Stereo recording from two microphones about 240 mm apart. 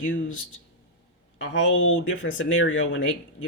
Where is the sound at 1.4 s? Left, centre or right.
Left.